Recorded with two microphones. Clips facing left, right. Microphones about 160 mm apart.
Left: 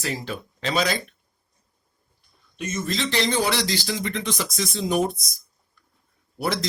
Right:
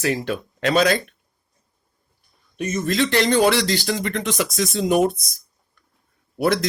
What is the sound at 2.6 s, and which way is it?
Speech, 45° right (ahead or behind).